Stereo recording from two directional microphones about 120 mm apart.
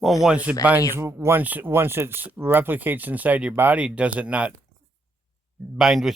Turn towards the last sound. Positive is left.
turn(degrees=-5)  # may be behind; listen again after turning